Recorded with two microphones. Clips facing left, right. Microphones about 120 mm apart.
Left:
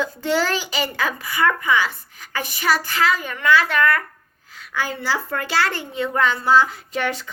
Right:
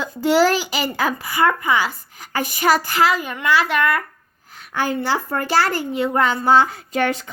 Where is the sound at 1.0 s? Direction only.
40° right (ahead or behind).